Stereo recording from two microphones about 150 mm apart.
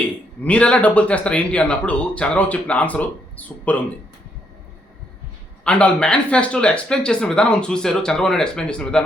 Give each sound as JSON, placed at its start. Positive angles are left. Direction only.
{"t": 0.4, "sound": "speech", "side_deg": 10}
{"t": 5.6, "sound": "speech", "side_deg": 10}